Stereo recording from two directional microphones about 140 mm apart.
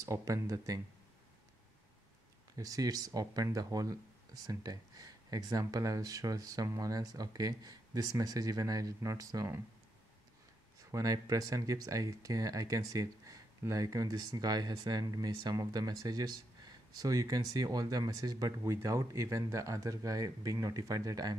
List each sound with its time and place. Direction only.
0.0 s speech: 20° right (ahead or behind)
2.5 s speech: 25° right (ahead or behind)
10.8 s speech: 25° right (ahead or behind)